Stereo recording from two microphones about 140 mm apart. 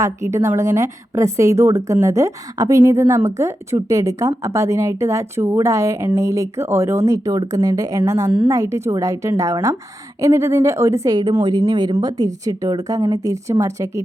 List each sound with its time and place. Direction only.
0.0 s a woman's voice: 20° right (ahead or behind)